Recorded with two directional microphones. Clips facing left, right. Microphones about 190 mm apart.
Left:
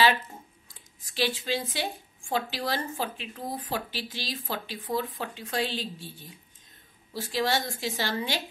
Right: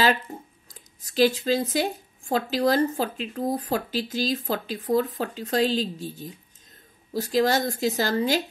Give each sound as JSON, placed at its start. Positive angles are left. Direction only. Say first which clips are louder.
{"t": 0.7, "sound": "speech", "louder": "right 9 dB", "side_deg": -40}